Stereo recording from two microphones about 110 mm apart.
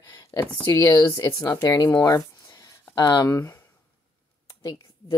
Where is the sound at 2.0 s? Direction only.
30° left (ahead or behind).